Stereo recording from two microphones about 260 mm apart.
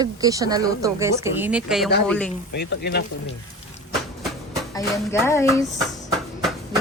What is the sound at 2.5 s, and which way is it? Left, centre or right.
Speech, left.